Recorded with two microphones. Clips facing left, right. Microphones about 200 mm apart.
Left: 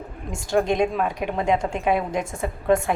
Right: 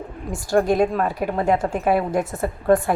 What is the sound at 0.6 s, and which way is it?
Speech, 5° right (ahead or behind).